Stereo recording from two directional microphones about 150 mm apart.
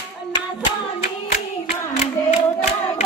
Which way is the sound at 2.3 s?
50° left (ahead or behind).